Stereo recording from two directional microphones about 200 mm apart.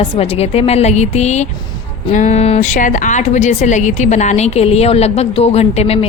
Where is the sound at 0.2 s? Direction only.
30° left (ahead or behind).